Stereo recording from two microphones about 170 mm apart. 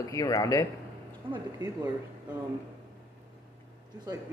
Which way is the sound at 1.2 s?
30° right (ahead or behind).